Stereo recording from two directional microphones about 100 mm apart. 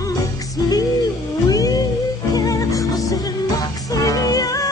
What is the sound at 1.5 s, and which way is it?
Music, 40° left (ahead or behind).